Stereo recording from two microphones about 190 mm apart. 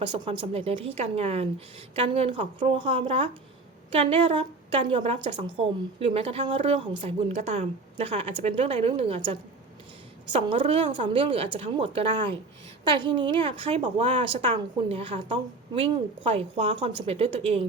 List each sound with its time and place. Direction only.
0.0 s a woman's voice: 25° right (ahead or behind)